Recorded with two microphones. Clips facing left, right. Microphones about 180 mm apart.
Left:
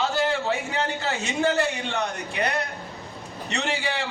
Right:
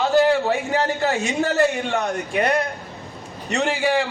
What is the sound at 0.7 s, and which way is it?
A woman's voice, 40° right (ahead or behind).